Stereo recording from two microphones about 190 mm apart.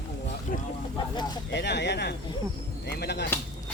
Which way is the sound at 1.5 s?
65° left (ahead or behind).